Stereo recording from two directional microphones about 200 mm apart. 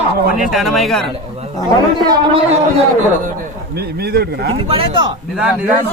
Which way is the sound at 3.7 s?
50° right (ahead or behind).